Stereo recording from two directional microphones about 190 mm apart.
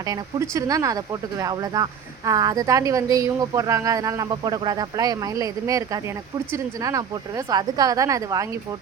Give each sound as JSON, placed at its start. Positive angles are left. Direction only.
{"t": 0.0, "sound": "speech", "side_deg": -15}